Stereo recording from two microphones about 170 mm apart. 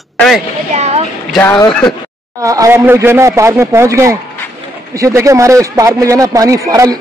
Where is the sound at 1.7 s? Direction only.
Centre (ahead or behind).